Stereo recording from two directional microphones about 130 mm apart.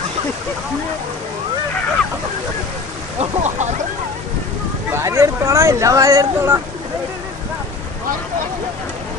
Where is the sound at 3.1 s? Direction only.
60° right (ahead or behind).